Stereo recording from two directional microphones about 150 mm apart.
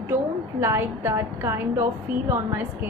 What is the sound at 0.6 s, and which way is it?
Speech, 15° right (ahead or behind).